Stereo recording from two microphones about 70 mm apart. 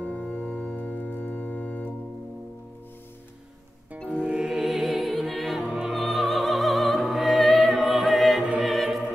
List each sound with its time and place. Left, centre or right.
0.0 s organ: centre
4.2 s opera: centre
8.5 s music: centre